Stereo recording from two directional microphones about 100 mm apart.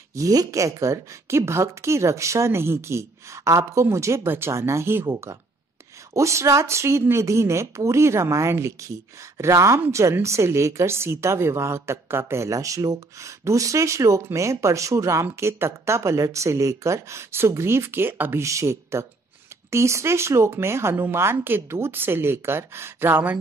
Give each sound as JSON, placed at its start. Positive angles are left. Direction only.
{"t": 0.1, "sound": "a woman's voice", "side_deg": -35}